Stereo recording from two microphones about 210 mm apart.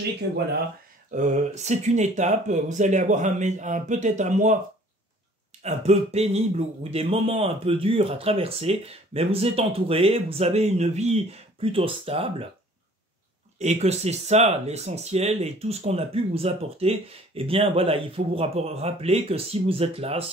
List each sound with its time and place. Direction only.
1.1 s speech: 35° right (ahead or behind)
5.6 s speech: 30° right (ahead or behind)
13.6 s speech: 30° right (ahead or behind)